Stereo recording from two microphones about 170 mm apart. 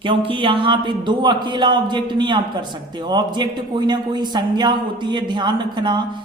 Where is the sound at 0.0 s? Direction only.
30° right (ahead or behind).